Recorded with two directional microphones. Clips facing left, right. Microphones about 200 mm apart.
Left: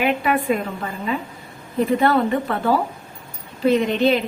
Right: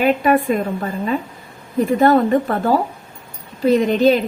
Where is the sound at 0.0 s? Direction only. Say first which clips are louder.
Right 5 dB; 40° right (ahead or behind).